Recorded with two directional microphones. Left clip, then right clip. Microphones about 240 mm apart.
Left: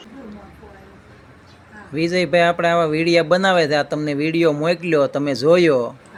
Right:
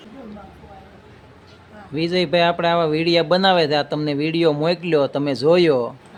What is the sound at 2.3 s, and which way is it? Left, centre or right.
Speech, centre.